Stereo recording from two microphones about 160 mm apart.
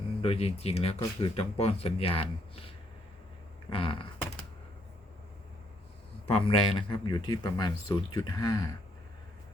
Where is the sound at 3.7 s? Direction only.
35° left (ahead or behind).